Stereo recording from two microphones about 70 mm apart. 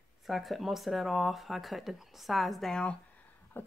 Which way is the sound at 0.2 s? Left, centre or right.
Centre.